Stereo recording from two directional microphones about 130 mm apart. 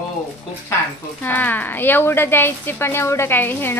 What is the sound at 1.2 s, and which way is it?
A woman's voice, 15° left (ahead or behind).